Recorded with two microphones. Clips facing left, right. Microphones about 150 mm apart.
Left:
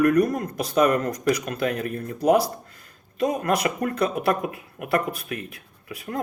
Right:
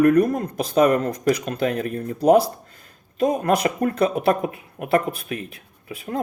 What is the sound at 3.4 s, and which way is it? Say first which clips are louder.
Speech: right 3 dB; 30° right (ahead or behind).